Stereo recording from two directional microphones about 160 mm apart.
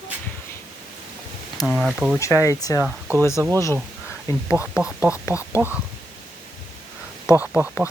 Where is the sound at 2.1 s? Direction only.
20° left (ahead or behind).